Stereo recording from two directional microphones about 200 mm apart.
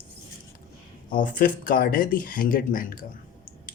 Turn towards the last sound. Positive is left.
turn(degrees=45)  # may be behind; listen again after turning